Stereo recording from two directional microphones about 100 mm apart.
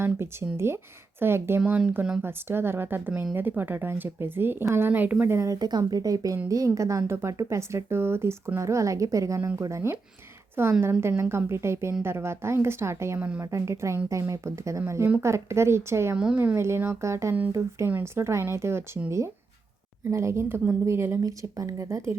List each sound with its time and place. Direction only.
0.0 s speech: 25° right (ahead or behind)
5.5 s speech: 40° right (ahead or behind)
13.1 s speech: 15° right (ahead or behind)
13.4 s speech: 30° right (ahead or behind)
16.1 s speech: 10° right (ahead or behind)
16.6 s speech: 25° right (ahead or behind)
20.1 s speech: 30° right (ahead or behind)